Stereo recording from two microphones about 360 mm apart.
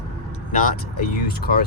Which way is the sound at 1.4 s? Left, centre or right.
Left.